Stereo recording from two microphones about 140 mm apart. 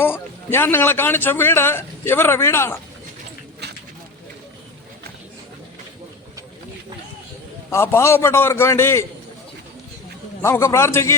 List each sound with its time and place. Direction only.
0.0 s a man's voice: 15° left (ahead or behind)
7.7 s a man's voice: 20° left (ahead or behind)
10.4 s a man's voice: 20° left (ahead or behind)